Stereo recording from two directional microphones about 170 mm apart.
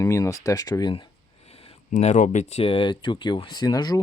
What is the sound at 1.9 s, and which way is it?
Speech, 45° left (ahead or behind).